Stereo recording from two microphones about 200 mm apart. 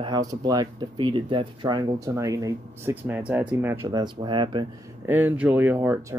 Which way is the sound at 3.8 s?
20° right (ahead or behind).